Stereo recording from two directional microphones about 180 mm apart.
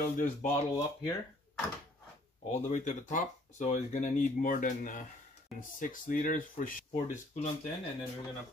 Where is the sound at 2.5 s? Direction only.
40° left (ahead or behind).